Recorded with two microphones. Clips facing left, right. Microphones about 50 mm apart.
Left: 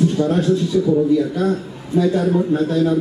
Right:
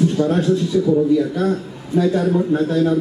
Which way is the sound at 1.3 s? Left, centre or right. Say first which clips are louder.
Even; centre.